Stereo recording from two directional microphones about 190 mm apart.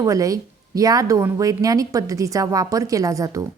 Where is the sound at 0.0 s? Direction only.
15° right (ahead or behind).